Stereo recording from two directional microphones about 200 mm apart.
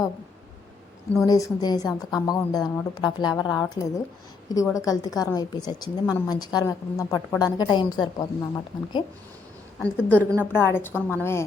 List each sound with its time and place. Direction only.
1.2 s a woman's voice: 15° left (ahead or behind)
9.7 s a woman's voice: 5° left (ahead or behind)